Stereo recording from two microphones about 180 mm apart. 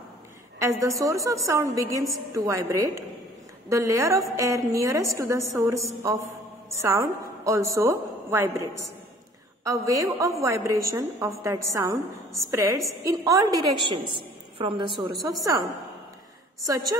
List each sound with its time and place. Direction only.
0.6 s a woman's voice: 15° right (ahead or behind)
16.6 s a woman's voice: 20° right (ahead or behind)